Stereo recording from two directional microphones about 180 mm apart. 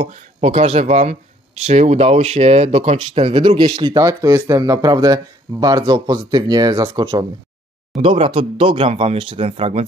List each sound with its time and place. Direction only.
0.0 s speech: 40° right (ahead or behind)